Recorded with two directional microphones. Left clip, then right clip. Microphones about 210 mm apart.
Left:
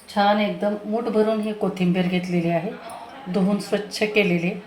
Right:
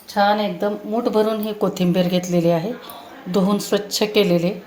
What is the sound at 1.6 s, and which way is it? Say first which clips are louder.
Speech: right 4 dB; 35° right (ahead or behind).